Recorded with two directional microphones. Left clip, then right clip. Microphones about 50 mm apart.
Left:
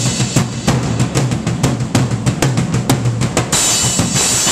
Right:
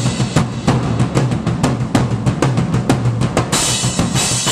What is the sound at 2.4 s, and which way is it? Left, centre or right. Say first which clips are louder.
Music: even; centre.